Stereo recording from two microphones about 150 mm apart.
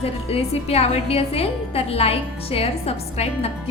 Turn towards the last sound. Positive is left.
turn(degrees=40)  # may be behind; listen again after turning